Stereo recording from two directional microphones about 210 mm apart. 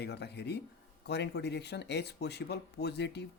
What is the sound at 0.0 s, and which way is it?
Speech, 55° left (ahead or behind).